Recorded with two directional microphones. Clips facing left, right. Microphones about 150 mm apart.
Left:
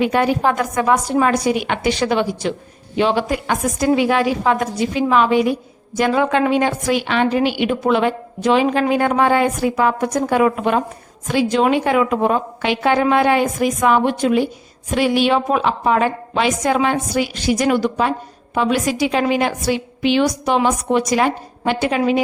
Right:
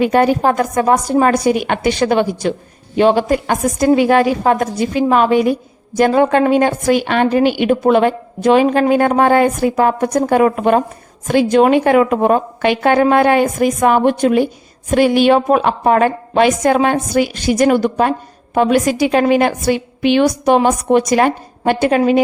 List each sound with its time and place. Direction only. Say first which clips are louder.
0.0 s a woman's voice: right 4 dB; 45° right (ahead or behind)